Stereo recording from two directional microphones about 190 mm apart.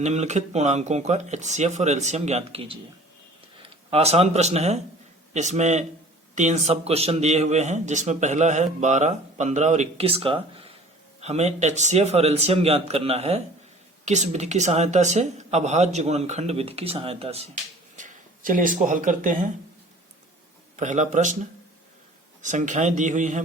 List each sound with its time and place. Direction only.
0.0 s a man's voice: 35° right (ahead or behind)
20.7 s a man's voice: 40° right (ahead or behind)
22.4 s a man's voice: 40° right (ahead or behind)